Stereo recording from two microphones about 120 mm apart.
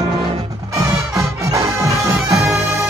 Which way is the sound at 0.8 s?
25° right (ahead or behind).